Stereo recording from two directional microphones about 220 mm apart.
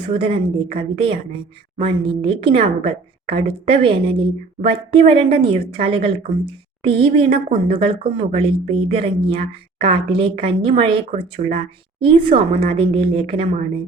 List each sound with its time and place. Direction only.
0.0 s a woman's voice: 25° right (ahead or behind)